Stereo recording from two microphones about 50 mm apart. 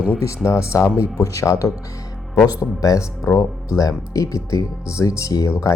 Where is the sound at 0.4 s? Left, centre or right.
Left.